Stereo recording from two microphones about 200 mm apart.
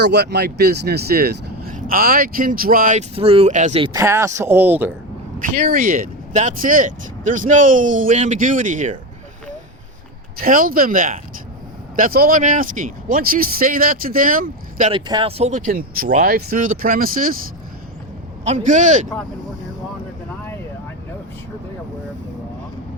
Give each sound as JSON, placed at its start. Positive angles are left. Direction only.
{"t": 0.0, "sound": "speech", "side_deg": -55}
{"t": 3.2, "sound": "speech", "side_deg": -30}
{"t": 3.9, "sound": "speech", "side_deg": -15}
{"t": 5.4, "sound": "speech", "side_deg": -45}
{"t": 10.4, "sound": "speech", "side_deg": -45}
{"t": 14.9, "sound": "speech", "side_deg": -25}
{"t": 18.4, "sound": "speech", "side_deg": -35}